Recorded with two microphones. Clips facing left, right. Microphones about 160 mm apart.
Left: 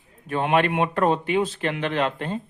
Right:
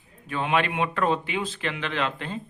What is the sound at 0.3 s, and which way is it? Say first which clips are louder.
Speech: left 4 dB; 45° left (ahead or behind).